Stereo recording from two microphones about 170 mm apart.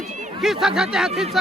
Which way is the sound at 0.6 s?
5° right (ahead or behind).